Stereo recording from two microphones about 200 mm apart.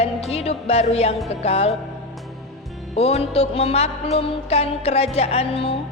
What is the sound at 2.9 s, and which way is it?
Speech, 30° left (ahead or behind).